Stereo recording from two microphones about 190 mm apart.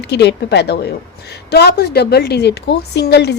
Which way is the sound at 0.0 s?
60° left (ahead or behind).